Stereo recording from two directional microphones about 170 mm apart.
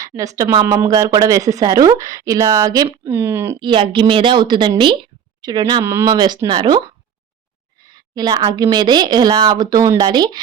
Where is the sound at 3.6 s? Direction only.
30° right (ahead or behind).